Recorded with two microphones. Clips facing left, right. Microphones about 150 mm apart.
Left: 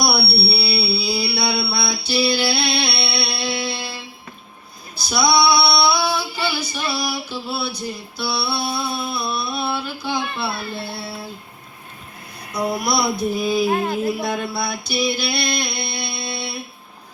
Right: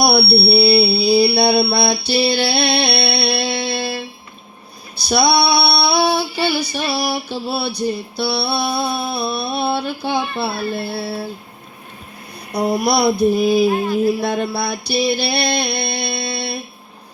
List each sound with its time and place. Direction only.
0.0 s female singing: 60° right (ahead or behind)
5.0 s female singing: 60° right (ahead or behind)
12.7 s female singing: 60° right (ahead or behind)
14.2 s a sound: 60° right (ahead or behind)